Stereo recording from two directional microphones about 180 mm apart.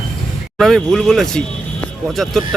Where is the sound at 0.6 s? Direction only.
Centre (ahead or behind).